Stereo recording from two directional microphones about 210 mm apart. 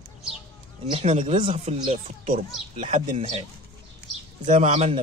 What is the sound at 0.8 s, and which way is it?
Speech, 30° right (ahead or behind).